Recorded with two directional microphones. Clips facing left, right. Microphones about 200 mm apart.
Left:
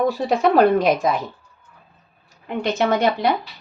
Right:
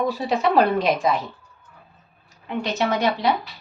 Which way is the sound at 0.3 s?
50° left (ahead or behind).